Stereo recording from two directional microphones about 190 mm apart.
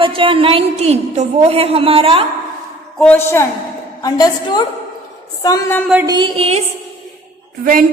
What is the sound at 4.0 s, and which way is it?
A woman's voice, 20° left (ahead or behind).